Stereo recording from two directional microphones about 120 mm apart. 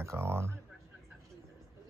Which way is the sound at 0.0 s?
20° right (ahead or behind).